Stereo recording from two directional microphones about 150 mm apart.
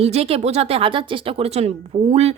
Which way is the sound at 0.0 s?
40° right (ahead or behind).